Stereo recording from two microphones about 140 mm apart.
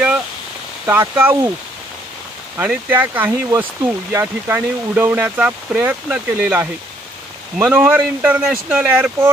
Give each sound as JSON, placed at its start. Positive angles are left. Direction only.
{"t": 0.8, "sound": "speech", "side_deg": -15}
{"t": 2.5, "sound": "speech", "side_deg": -10}